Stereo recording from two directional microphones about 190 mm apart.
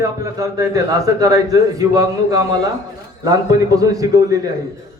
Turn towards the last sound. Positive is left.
turn(degrees=-20)  # may be behind; listen again after turning